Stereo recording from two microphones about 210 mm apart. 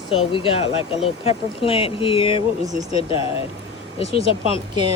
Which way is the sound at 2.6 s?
15° right (ahead or behind).